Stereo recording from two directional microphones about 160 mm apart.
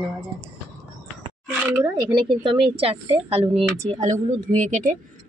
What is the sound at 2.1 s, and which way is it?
A woman's voice, 30° right (ahead or behind).